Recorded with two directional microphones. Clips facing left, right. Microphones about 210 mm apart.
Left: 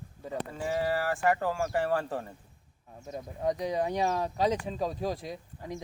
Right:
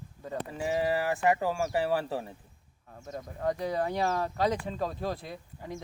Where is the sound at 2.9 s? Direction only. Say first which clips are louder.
Even; 10° left (ahead or behind).